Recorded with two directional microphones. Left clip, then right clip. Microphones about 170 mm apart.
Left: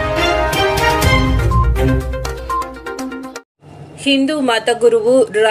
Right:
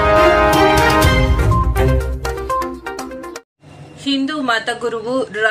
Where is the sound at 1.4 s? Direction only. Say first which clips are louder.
Even; centre (ahead or behind).